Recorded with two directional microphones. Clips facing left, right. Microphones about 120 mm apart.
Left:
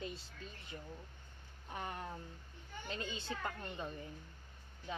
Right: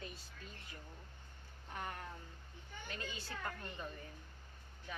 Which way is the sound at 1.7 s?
20° left (ahead or behind).